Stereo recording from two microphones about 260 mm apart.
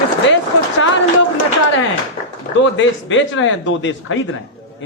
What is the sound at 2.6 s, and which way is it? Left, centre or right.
A man's voice, left.